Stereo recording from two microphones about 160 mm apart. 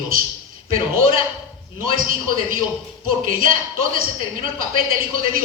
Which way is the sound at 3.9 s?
60° right (ahead or behind).